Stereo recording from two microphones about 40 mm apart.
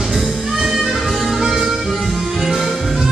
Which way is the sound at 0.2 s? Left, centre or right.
Centre.